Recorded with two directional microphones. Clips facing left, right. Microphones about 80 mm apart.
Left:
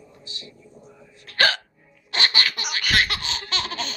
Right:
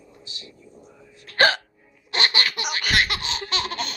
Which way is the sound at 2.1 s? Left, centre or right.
Centre.